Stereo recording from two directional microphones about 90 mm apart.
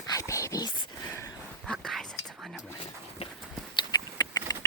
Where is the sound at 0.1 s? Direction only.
35° left (ahead or behind).